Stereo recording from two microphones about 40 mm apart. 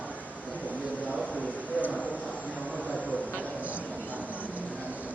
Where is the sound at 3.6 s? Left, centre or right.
Right.